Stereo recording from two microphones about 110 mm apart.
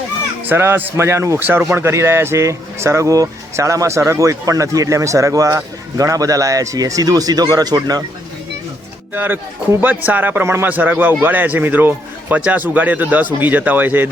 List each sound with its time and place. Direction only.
0.4 s speech: 20° right (ahead or behind); by 8.0 s 35° right (ahead or behind)
9.1 s speech: 20° right (ahead or behind)